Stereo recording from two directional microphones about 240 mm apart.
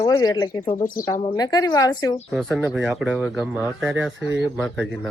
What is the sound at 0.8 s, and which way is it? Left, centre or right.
Speech, left.